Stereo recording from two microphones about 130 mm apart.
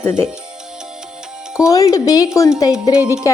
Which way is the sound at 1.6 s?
25° left (ahead or behind).